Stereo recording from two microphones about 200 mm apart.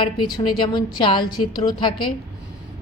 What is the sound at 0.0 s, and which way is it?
A woman's voice, 20° left (ahead or behind).